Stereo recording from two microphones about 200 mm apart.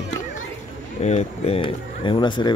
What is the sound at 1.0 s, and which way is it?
Speech, 35° left (ahead or behind).